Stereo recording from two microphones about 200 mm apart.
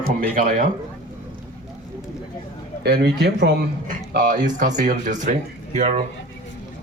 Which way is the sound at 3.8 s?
45° right (ahead or behind).